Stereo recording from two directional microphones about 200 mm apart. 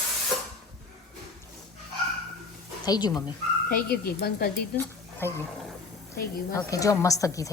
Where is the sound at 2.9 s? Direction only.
20° left (ahead or behind).